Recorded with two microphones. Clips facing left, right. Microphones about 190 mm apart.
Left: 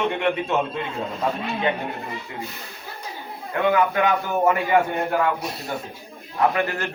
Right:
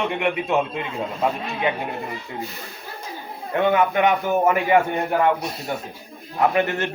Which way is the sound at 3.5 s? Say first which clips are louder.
Right 2 dB; 25° right (ahead or behind).